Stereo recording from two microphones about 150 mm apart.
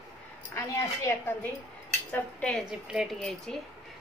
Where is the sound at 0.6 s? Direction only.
15° left (ahead or behind).